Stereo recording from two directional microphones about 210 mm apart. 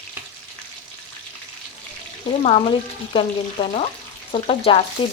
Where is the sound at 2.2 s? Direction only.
25° left (ahead or behind).